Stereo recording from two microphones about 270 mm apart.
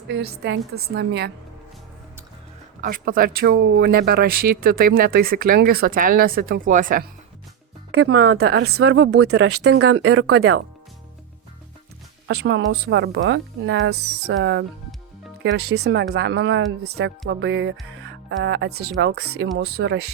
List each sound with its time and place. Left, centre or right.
0.1 s speech: right
2.8 s speech: right
7.9 s speech: right
8.8 s speech: right
9.1 s speech: right
12.3 s speech: right